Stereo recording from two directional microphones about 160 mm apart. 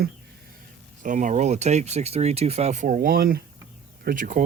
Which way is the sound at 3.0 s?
70° right (ahead or behind).